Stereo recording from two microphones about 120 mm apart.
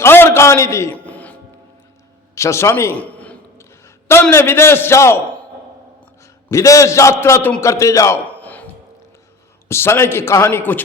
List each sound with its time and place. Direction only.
0.0 s a sound: 20° left (ahead or behind)
0.9 s music: 15° left (ahead or behind)
2.3 s a man's voice: 25° left (ahead or behind)
6.5 s a man's voice: 25° left (ahead or behind)